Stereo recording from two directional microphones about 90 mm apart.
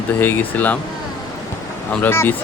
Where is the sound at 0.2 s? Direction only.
20° left (ahead or behind).